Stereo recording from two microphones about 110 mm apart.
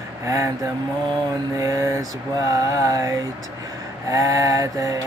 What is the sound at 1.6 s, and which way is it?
Mantra, 30° right (ahead or behind).